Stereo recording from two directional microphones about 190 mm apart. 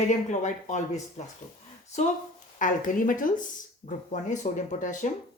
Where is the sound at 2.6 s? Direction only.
45° left (ahead or behind).